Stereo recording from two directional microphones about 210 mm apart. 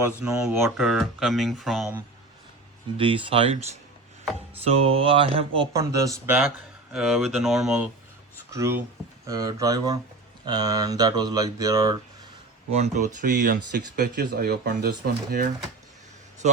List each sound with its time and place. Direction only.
0.3 s speech: centre (ahead or behind)
3.0 s speech: 25° right (ahead or behind)
4.8 s speech: 25° right (ahead or behind); by 7.9 s centre (ahead or behind)
8.4 s speech: 15° right (ahead or behind)
12.7 s speech: 35° right (ahead or behind)
13.2 s speech: 45° right (ahead or behind)